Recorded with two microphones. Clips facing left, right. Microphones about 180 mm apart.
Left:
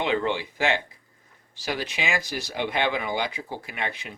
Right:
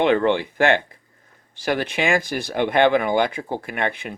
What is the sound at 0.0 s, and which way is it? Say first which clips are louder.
Speech: right 7 dB; 55° right (ahead or behind).